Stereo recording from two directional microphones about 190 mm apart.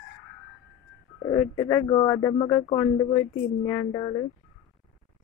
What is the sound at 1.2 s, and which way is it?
Speech, 15° left (ahead or behind).